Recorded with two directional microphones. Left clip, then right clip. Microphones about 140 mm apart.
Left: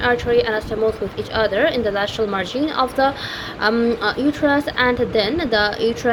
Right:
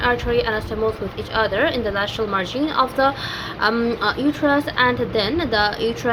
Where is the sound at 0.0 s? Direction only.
25° left (ahead or behind).